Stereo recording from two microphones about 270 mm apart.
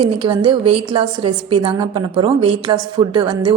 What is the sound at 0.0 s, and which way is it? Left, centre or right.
A woman's voice, centre.